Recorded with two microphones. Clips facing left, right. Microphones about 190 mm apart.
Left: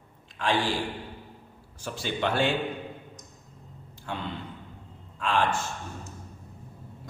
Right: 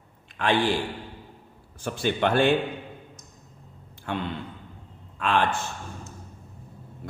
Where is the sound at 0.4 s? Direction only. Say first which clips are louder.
Right 3 dB; 55° right (ahead or behind).